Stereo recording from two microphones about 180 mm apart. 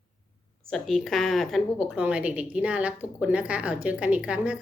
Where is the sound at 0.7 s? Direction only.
Centre (ahead or behind).